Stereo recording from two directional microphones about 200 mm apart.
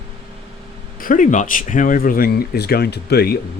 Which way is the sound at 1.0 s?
40° left (ahead or behind).